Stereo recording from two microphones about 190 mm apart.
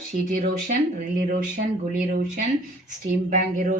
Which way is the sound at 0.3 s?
45° right (ahead or behind).